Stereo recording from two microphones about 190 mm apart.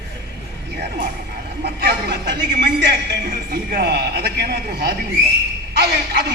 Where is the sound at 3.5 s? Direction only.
55° right (ahead or behind).